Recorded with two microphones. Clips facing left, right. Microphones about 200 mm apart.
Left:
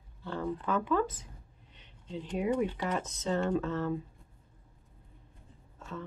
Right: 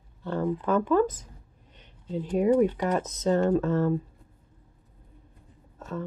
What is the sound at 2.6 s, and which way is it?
Speech, 45° right (ahead or behind).